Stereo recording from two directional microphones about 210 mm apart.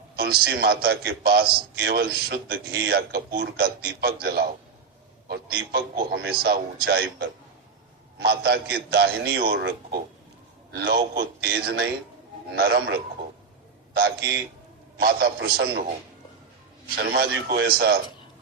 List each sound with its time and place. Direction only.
0.2 s a man's voice: 50° right (ahead or behind)
17.0 s a man's voice: 50° right (ahead or behind)